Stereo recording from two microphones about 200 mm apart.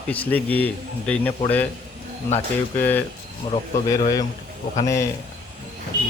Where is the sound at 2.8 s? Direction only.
10° left (ahead or behind).